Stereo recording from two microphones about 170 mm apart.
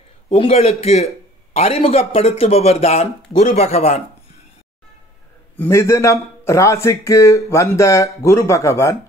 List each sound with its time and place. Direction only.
0.3 s a man's voice: 35° left (ahead or behind)
5.6 s a man's voice: 15° left (ahead or behind)